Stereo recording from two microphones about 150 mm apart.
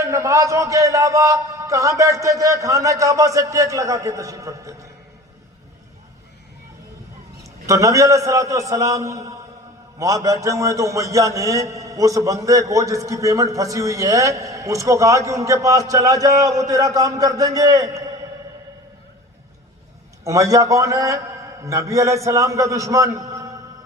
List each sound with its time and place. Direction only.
0.0 s a man's voice: 20° right (ahead or behind)
7.4 s a man's voice: 20° right (ahead or behind)
20.2 s a man's voice: 20° right (ahead or behind)